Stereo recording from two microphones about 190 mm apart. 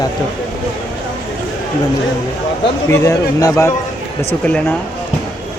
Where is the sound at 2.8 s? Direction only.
15° left (ahead or behind).